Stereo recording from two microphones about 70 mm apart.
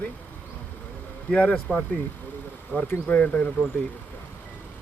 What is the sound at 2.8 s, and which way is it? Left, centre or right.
Speech, left.